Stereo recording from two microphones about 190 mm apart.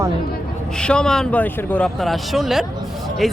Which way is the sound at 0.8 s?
5° left (ahead or behind).